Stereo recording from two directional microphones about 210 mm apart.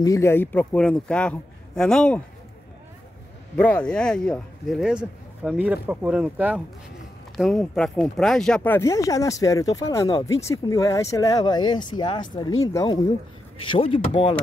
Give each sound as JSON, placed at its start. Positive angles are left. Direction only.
{"t": 0.0, "sound": "a man's voice", "side_deg": 15}
{"t": 3.5, "sound": "a man's voice", "side_deg": 5}